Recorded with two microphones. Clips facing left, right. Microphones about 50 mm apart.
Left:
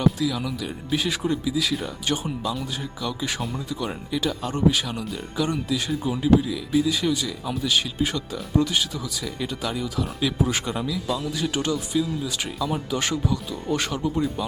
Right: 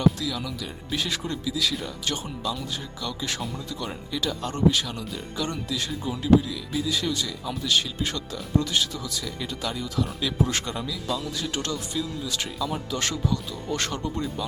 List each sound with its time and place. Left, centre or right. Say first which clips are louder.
0.0 s speech: left 2 dB; centre